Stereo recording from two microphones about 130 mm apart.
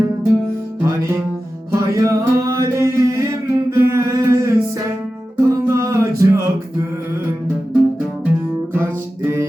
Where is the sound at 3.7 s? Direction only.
25° right (ahead or behind).